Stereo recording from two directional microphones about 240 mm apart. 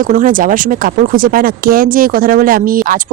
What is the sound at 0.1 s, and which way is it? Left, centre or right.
Speech, right.